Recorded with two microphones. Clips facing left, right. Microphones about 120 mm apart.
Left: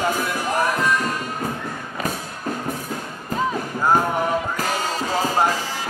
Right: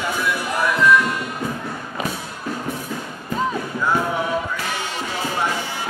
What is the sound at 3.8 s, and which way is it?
Music, 40° left (ahead or behind).